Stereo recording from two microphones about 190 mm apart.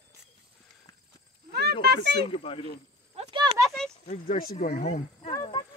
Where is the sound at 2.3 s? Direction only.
30° left (ahead or behind).